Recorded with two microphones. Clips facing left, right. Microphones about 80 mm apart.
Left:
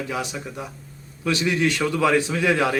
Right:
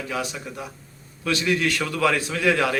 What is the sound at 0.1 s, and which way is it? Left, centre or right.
Speech, centre.